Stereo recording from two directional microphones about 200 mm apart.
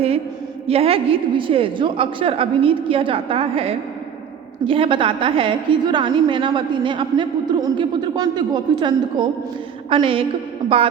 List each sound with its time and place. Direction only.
0.7 s a woman's voice: 30° right (ahead or behind)